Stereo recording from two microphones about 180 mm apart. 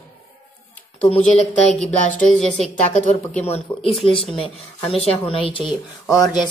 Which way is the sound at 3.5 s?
30° left (ahead or behind).